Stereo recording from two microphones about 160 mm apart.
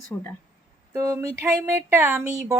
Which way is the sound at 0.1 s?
10° left (ahead or behind).